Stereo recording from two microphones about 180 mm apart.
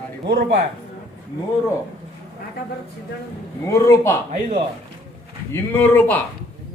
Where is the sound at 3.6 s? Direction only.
15° left (ahead or behind).